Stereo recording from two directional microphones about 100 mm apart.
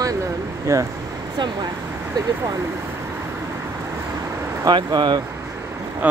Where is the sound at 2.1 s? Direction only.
35° right (ahead or behind).